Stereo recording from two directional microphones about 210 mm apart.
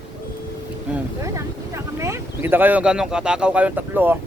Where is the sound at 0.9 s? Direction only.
15° right (ahead or behind).